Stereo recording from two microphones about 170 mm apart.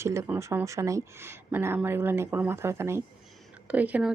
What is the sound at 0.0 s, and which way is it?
Speech, 15° right (ahead or behind).